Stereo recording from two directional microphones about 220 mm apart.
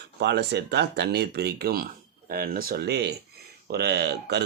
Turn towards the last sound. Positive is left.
turn(degrees=-50)  # may be behind; listen again after turning